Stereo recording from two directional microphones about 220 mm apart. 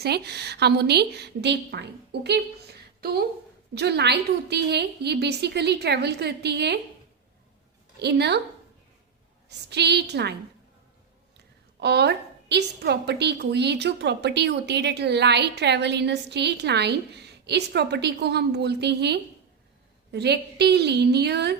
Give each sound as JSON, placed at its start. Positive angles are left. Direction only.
{"t": 0.0, "sound": "a woman's voice", "side_deg": -50}
{"t": 3.8, "sound": "a woman's voice", "side_deg": -50}
{"t": 7.9, "sound": "a woman's voice", "side_deg": -50}
{"t": 9.6, "sound": "a woman's voice", "side_deg": -50}
{"t": 11.8, "sound": "a woman's voice", "side_deg": -50}